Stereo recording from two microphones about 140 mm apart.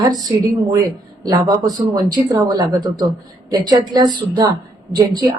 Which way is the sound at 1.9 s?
30° right (ahead or behind).